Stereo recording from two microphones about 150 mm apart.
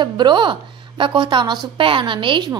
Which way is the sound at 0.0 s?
30° right (ahead or behind).